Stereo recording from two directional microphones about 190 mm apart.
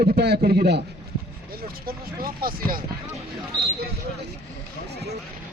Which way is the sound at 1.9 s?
50° right (ahead or behind).